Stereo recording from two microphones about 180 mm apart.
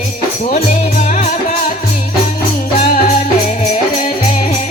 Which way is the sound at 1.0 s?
40° left (ahead or behind).